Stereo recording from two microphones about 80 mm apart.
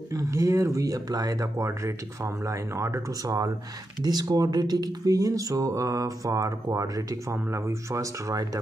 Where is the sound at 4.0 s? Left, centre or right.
Right.